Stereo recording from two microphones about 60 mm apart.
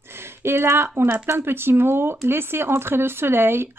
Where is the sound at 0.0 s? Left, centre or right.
Right.